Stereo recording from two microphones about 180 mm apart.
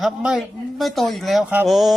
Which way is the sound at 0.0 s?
5° right (ahead or behind).